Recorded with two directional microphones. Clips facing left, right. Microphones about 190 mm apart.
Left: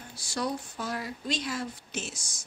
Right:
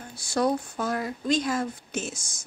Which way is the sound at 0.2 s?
55° right (ahead or behind).